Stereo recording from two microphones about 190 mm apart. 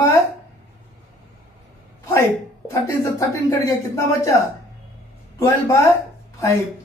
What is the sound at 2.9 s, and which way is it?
Speech, 15° left (ahead or behind).